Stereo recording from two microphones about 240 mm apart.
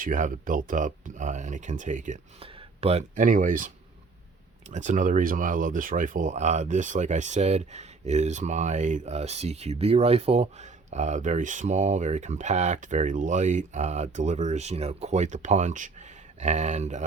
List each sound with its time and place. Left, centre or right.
0.0 s speech: right
4.7 s speech: right